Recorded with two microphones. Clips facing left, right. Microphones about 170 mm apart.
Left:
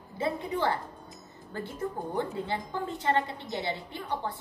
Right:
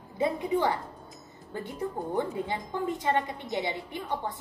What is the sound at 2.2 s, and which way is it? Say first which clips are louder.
A woman's voice: right 1 dB; 15° right (ahead or behind).